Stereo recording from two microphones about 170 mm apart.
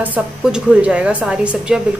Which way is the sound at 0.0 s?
5° right (ahead or behind).